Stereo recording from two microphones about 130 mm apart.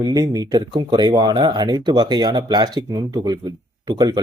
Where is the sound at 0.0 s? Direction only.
30° right (ahead or behind).